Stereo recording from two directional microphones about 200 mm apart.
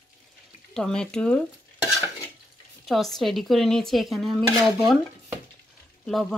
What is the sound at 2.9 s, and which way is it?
Speech, centre (ahead or behind).